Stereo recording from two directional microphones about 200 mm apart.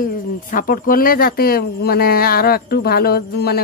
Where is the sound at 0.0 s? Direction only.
45° left (ahead or behind).